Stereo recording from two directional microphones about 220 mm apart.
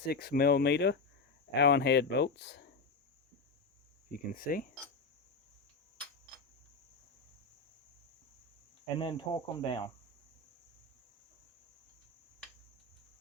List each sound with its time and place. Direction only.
0.1 s speech: 45° left (ahead or behind)
4.3 s speech: 40° left (ahead or behind)
9.0 s speech: 20° left (ahead or behind)